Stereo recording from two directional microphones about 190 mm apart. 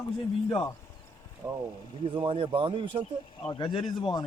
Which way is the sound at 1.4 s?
15° right (ahead or behind).